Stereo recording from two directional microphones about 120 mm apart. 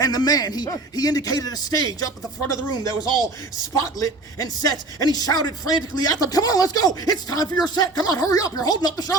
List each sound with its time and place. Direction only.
0.0 s speech: 35° left (ahead or behind)
3.9 s speech: 30° left (ahead or behind)